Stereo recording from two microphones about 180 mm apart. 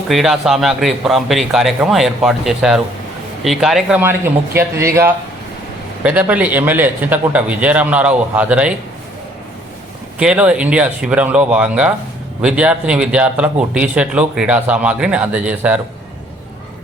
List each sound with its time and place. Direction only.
0.1 s a man's voice: centre (ahead or behind)
6.0 s speech: 10° right (ahead or behind)
10.2 s speech: 5° right (ahead or behind)